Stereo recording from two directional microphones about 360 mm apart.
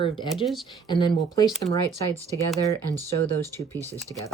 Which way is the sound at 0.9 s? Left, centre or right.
Centre.